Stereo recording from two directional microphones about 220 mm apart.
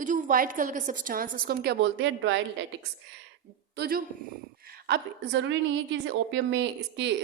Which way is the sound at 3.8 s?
40° right (ahead or behind).